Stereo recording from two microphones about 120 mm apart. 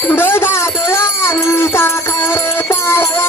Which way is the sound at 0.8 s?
20° left (ahead or behind).